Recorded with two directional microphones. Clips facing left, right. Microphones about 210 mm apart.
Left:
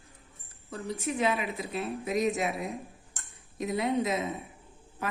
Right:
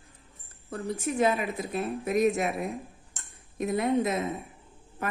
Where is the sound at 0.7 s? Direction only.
50° right (ahead or behind).